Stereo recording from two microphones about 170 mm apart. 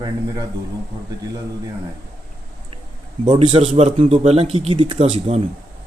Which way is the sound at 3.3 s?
35° right (ahead or behind).